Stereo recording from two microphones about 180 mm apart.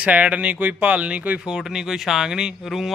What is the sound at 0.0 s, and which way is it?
Speech, 5° right (ahead or behind).